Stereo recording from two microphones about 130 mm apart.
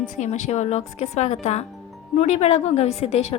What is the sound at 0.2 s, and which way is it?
A woman's voice, 65° left (ahead or behind).